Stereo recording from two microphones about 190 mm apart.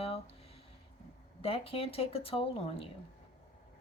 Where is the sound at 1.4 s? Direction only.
30° left (ahead or behind).